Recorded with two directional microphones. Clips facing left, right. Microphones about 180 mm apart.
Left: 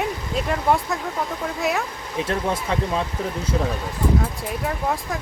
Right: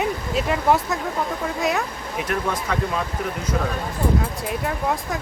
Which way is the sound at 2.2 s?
25° left (ahead or behind).